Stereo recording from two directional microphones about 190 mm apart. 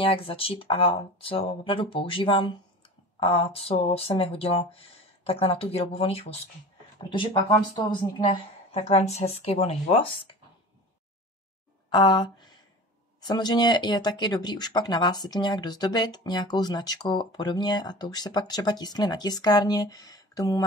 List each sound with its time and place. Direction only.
0.0 s speech: 30° left (ahead or behind)
11.9 s speech: 20° left (ahead or behind)